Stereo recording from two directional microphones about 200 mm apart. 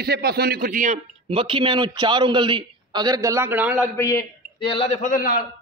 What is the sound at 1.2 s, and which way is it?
A man's voice, 25° right (ahead or behind).